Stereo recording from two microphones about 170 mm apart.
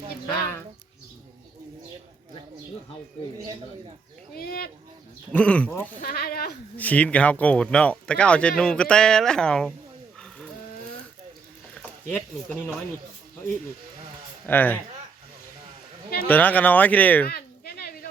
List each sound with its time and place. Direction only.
4.4 s speech: 65° left (ahead or behind)
5.3 s speech: 10° left (ahead or behind)
6.0 s speech: 60° left (ahead or behind)
6.7 s speech: 10° left (ahead or behind)
10.2 s livestock: 5° left (ahead or behind)
14.4 s speech: 10° left (ahead or behind)
16.2 s speech: 10° left (ahead or behind)
17.2 s a sound: 65° left (ahead or behind)